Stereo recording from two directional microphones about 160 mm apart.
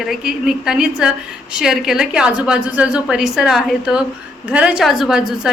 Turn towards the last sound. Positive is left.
turn(degrees=-5)  # may be behind; listen again after turning